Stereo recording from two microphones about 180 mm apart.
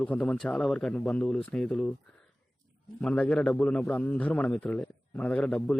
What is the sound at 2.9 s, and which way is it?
A man's voice, 5° left (ahead or behind).